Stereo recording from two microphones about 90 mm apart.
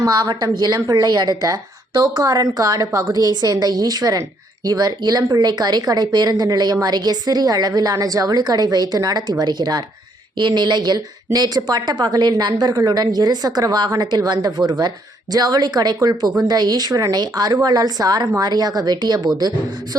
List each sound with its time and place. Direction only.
0.0 s a woman's voice: 50° right (ahead or behind)